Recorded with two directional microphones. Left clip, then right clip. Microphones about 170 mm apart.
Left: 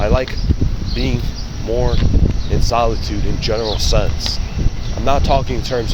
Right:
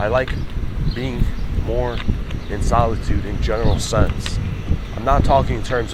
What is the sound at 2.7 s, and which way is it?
Speech, 25° left (ahead or behind).